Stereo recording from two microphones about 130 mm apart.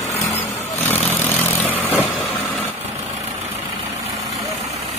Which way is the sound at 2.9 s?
55° right (ahead or behind).